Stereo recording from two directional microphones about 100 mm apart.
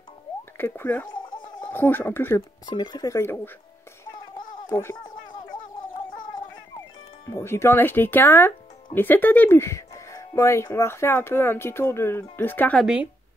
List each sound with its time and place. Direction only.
0.6 s speech: 20° left (ahead or behind)
1.1 s a sound: 50° left (ahead or behind)
1.6 s speech: 20° left (ahead or behind)
2.6 s speech: 45° left (ahead or behind)
3.1 s speech: 25° left (ahead or behind)
4.6 s speech: 20° left (ahead or behind)
7.2 s speech: 25° left (ahead or behind)
12.8 s speech: 10° right (ahead or behind)